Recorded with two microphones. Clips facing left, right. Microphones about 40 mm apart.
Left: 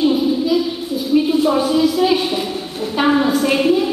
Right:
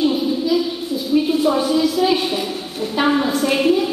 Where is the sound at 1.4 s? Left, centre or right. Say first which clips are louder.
Left 1 dB; centre.